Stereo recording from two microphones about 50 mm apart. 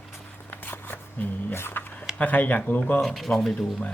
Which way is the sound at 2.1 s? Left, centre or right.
Left.